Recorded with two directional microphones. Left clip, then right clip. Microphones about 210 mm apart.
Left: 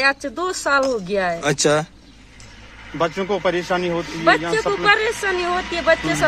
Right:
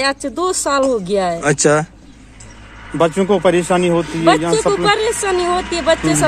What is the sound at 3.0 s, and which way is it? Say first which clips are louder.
Speech: right 7 dB; 50° right (ahead or behind).